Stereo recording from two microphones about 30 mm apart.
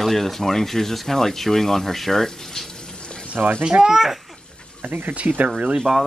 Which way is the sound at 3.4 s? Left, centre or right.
Right.